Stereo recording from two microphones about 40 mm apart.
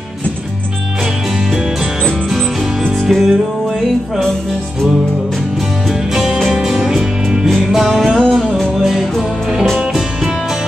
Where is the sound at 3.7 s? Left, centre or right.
Centre.